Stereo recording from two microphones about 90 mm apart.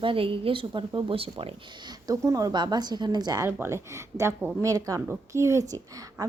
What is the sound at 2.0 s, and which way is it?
Speech, 40° right (ahead or behind).